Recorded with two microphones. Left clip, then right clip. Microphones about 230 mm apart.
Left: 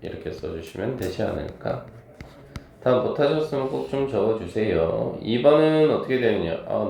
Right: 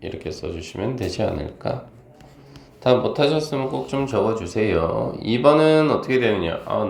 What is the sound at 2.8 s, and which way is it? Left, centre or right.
Speech, right.